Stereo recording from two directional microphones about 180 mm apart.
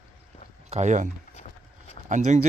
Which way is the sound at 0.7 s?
40° right (ahead or behind).